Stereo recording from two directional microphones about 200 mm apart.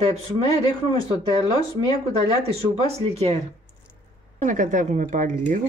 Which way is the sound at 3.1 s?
30° right (ahead or behind).